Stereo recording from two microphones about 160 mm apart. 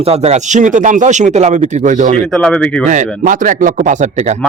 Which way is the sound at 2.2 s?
5° left (ahead or behind).